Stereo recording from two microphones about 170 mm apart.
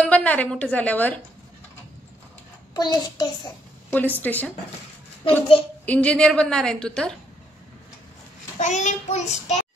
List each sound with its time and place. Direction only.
0.0 s a woman's voice: 10° left (ahead or behind)
2.7 s a child's voice: 25° left (ahead or behind)
3.9 s a woman's voice: 10° left (ahead or behind)
5.9 s a woman's voice: 5° left (ahead or behind)
8.5 s child singing: 45° left (ahead or behind)